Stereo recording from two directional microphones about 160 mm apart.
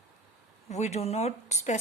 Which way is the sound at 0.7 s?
45° left (ahead or behind).